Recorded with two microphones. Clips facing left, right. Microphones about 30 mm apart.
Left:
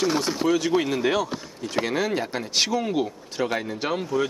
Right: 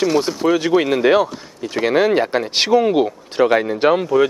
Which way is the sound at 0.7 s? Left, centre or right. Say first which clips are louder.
Right 8 dB; right.